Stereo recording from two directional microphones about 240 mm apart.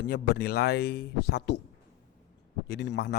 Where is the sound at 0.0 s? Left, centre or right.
Left.